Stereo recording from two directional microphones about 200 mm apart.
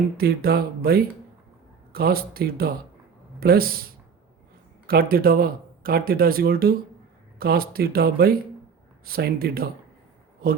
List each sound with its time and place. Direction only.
0.2 s speech: 50° right (ahead or behind)
4.9 s speech: 45° right (ahead or behind)